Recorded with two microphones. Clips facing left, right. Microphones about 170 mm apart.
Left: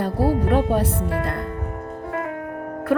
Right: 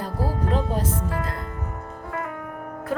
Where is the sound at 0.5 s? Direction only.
65° left (ahead or behind).